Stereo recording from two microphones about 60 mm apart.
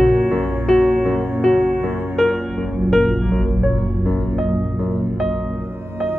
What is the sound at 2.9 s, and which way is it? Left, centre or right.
Music, centre.